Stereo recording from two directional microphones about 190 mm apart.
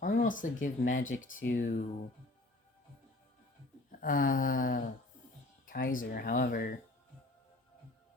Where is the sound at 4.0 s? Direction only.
45° left (ahead or behind).